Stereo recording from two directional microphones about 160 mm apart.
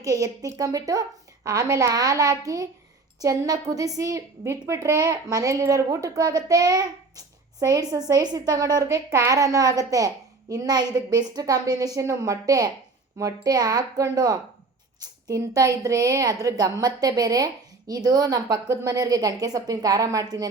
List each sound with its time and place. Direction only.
0.0 s a woman's voice: 20° right (ahead or behind)